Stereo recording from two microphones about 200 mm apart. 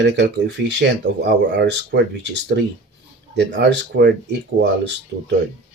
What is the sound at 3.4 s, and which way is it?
Speech, 60° right (ahead or behind).